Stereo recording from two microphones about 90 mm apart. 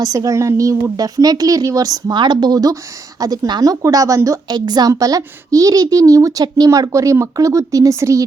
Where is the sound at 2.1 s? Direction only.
55° right (ahead or behind); by 4.4 s 35° right (ahead or behind).